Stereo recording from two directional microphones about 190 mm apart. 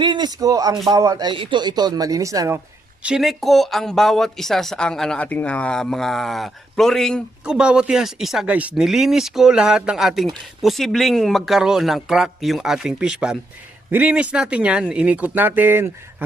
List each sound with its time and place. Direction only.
0.0 s speech: 25° right (ahead or behind)
3.0 s speech: 5° right (ahead or behind)